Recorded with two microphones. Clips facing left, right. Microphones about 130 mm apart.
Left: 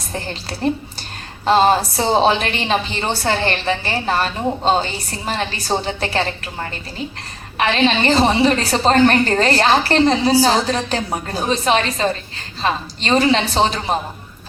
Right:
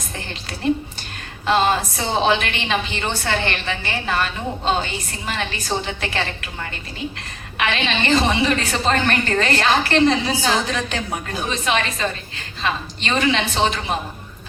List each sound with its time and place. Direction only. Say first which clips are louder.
0.1 s a woman's voice: left 7 dB; 35° left (ahead or behind)